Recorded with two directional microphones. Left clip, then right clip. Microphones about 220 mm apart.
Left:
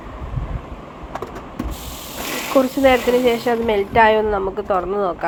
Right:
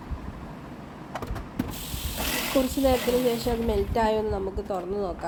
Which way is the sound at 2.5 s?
15° left (ahead or behind).